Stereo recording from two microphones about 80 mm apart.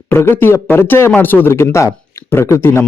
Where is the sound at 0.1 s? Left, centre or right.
Left.